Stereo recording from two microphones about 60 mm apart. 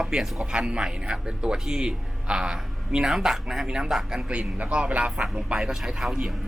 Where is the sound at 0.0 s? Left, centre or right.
Centre.